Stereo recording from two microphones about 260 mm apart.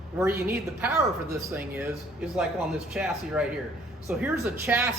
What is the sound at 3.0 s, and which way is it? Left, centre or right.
A man's voice, centre.